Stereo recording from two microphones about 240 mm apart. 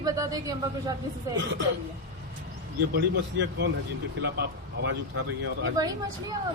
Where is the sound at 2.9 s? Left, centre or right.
Right.